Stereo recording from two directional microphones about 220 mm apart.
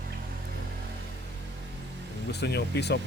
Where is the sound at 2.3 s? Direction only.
50° left (ahead or behind).